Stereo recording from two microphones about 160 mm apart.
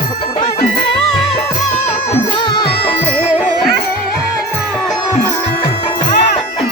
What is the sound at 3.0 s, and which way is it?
Music, 5° left (ahead or behind).